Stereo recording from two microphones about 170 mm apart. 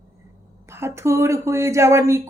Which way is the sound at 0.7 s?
15° right (ahead or behind).